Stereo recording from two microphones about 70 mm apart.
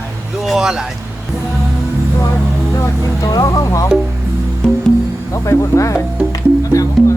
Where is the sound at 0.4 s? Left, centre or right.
Centre.